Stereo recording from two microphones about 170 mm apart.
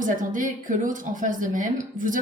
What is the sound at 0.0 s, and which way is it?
A woman's voice, 50° right (ahead or behind).